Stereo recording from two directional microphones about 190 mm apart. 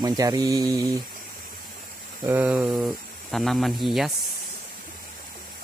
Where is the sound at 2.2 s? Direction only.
10° right (ahead or behind).